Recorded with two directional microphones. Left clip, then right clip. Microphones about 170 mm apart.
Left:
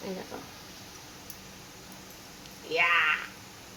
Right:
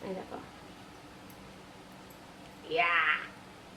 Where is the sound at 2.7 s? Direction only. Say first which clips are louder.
Left 3 dB; 25° left (ahead or behind).